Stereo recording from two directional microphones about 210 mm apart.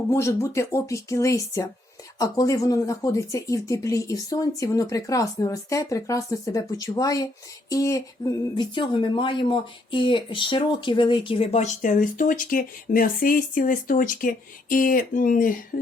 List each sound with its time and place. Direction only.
0.1 s speech: 15° left (ahead or behind); by 15.5 s 40° left (ahead or behind)